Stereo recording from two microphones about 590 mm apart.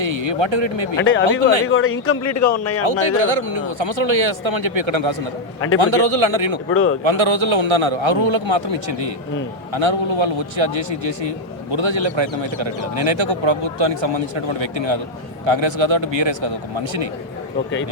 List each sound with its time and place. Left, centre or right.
0.0 s speech: right
0.9 s a man's voice: centre
3.0 s a man's voice: right
5.5 s a man's voice: left
5.8 s a man's voice: right
6.7 s a man's voice: left
7.0 s a man's voice: right